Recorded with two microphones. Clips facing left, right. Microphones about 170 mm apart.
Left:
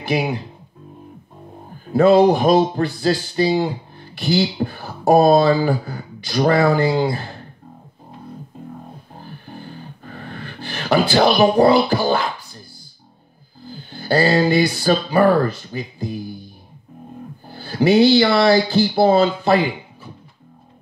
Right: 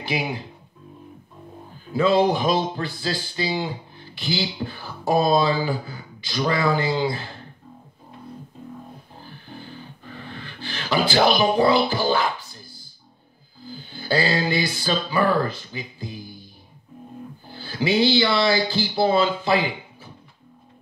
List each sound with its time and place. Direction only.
0.0 s speech: 55° left (ahead or behind)
1.7 s speech: 55° left (ahead or behind)
9.2 s beatboxing: 55° left (ahead or behind)
13.7 s speech: 55° left (ahead or behind)
17.5 s speech: 55° left (ahead or behind)